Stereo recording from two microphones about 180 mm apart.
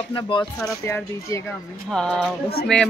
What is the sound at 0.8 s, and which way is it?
Speech, 15° left (ahead or behind).